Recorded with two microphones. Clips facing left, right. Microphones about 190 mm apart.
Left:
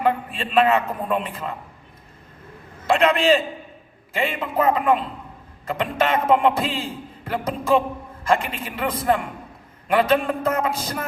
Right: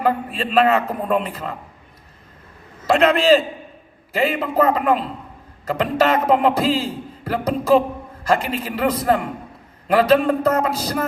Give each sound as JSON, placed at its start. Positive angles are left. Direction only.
{"t": 0.0, "sound": "a man's voice", "side_deg": -35}
{"t": 2.8, "sound": "a man's voice", "side_deg": -40}